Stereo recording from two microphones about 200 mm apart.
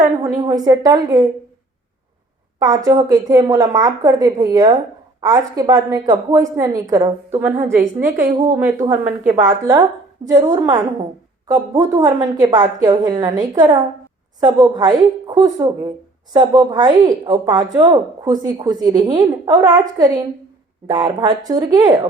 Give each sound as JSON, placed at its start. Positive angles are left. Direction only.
{"t": 0.0, "sound": "a woman's voice", "side_deg": -15}
{"t": 2.6, "sound": "a woman's voice", "side_deg": -15}
{"t": 8.0, "sound": "a woman's voice", "side_deg": -40}
{"t": 8.5, "sound": "a woman's voice", "side_deg": -15}
{"t": 10.2, "sound": "a woman's voice", "side_deg": -20}